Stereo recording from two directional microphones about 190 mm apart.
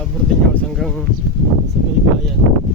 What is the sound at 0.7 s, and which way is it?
Speech, centre (ahead or behind).